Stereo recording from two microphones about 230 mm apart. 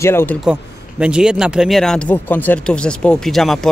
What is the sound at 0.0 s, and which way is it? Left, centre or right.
Speech, centre.